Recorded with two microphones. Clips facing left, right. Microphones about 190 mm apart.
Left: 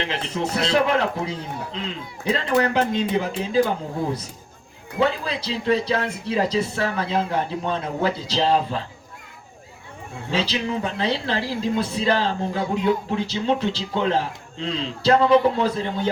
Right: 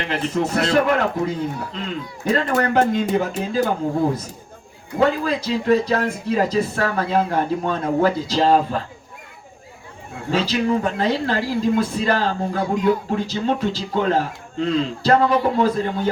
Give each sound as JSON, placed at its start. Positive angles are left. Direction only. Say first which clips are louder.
{"t": 0.0, "sound": "speech", "louder": "right 4 dB", "side_deg": -50}
{"t": 4.9, "sound": "speech", "louder": "right 4 dB", "side_deg": -45}
{"t": 10.3, "sound": "speech", "louder": "right 5 dB", "side_deg": -45}